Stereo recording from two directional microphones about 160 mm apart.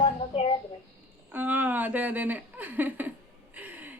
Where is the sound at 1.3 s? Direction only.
10° right (ahead or behind).